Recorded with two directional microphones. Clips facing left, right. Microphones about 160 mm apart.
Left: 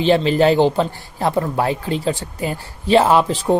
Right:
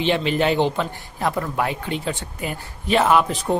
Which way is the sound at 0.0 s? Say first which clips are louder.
Left 6 dB; 35° left (ahead or behind).